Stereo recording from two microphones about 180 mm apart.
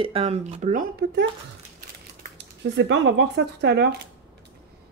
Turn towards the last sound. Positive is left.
turn(degrees=-70)  # may be behind; listen again after turning